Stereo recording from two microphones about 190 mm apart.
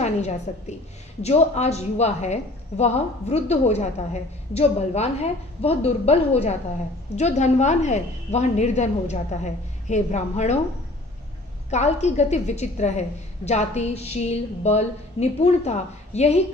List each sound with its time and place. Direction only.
0.0 s a woman's voice: 35° left (ahead or behind)
11.7 s a woman's voice: 35° left (ahead or behind)